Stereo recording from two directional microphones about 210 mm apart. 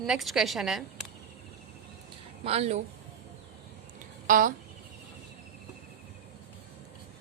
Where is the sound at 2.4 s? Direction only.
30° right (ahead or behind).